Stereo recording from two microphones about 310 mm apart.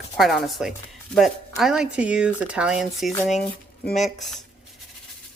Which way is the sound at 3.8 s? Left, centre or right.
Left.